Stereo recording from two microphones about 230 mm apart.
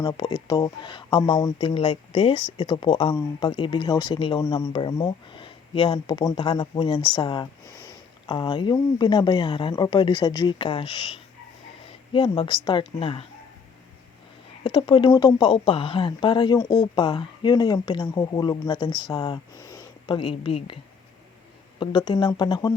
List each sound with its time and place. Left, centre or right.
0.0 s speech: centre
14.6 s speech: left
21.8 s speech: centre